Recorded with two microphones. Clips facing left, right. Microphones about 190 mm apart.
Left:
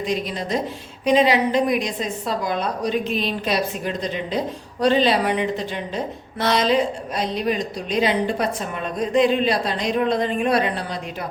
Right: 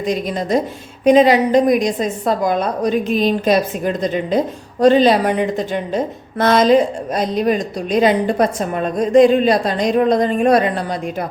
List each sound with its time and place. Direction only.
0.0 s a woman's voice: 45° right (ahead or behind)